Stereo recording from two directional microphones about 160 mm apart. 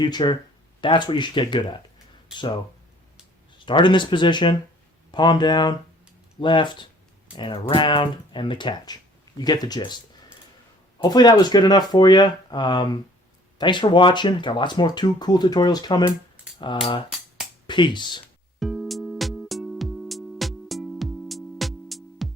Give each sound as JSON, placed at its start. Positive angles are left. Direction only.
{"t": 0.0, "sound": "speech", "side_deg": 25}
{"t": 3.7, "sound": "speech", "side_deg": 30}
{"t": 11.0, "sound": "speech", "side_deg": 25}
{"t": 18.6, "sound": "music", "side_deg": 0}